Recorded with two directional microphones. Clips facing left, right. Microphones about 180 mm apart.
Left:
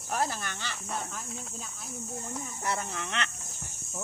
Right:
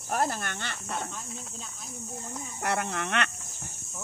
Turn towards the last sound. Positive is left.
turn(degrees=-65)  # may be behind; listen again after turning